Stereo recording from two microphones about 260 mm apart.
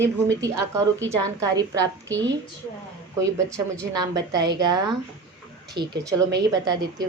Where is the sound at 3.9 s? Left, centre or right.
Centre.